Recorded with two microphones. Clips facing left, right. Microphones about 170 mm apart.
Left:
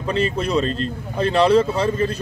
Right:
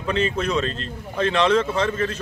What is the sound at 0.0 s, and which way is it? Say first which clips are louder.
Speech: left 1 dB; 35° left (ahead or behind).